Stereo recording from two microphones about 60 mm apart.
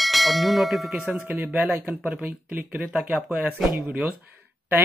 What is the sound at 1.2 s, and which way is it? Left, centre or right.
Speech, right.